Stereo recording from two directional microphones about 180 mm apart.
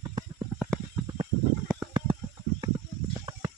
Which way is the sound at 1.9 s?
30° right (ahead or behind).